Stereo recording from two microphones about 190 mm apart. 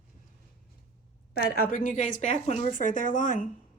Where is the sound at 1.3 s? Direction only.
50° left (ahead or behind).